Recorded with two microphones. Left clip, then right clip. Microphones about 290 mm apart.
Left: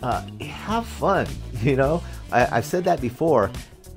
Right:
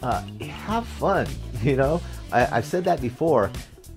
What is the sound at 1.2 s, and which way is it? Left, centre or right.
Speech, centre.